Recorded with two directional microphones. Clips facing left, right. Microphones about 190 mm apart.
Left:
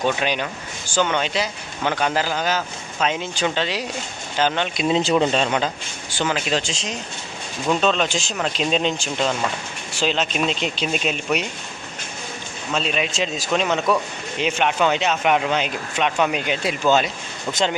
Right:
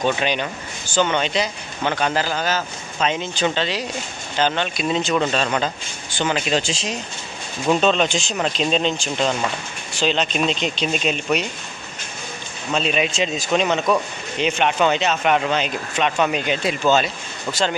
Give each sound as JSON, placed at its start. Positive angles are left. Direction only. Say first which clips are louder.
{"t": 0.0, "sound": "speech", "louder": "right 1 dB", "side_deg": 5}
{"t": 4.7, "sound": "speech", "louder": "left 2 dB", "side_deg": 25}
{"t": 6.1, "sound": "speech", "louder": "right 1 dB", "side_deg": 0}
{"t": 12.7, "sound": "speech", "louder": "right 3 dB", "side_deg": 0}